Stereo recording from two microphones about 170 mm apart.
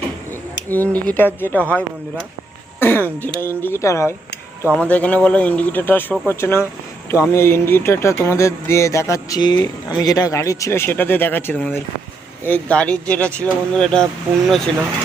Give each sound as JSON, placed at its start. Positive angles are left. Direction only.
{"t": 0.7, "sound": "speech", "side_deg": 10}
{"t": 2.8, "sound": "speech", "side_deg": 10}